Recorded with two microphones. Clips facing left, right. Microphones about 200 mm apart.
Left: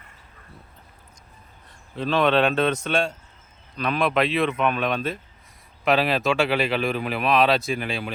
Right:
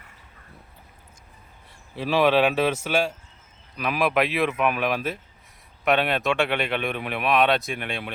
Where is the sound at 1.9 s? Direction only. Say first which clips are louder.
Even; 10° right (ahead or behind).